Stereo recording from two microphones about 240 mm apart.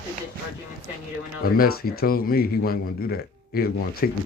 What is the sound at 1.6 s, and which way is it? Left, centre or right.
A man's voice, left.